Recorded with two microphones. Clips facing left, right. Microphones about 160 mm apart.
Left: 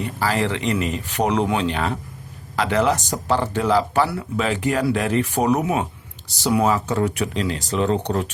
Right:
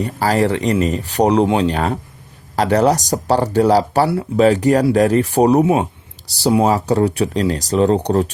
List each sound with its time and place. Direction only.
0.0 s speech: 40° right (ahead or behind)